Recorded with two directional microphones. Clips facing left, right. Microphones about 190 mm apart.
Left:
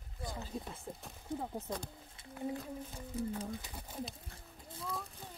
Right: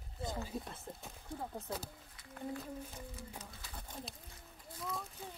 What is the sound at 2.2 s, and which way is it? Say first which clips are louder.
Humming: left 4 dB; 25° left (ahead or behind).